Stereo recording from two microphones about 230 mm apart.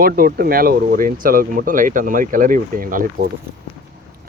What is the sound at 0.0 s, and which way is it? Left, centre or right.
Speech, right.